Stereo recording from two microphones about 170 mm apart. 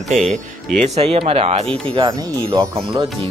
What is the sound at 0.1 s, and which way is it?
Speech, 45° right (ahead or behind).